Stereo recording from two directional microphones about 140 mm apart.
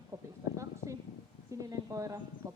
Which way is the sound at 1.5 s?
25° right (ahead or behind).